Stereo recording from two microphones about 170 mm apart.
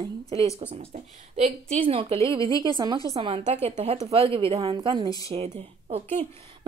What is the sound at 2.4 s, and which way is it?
Speech, 20° left (ahead or behind).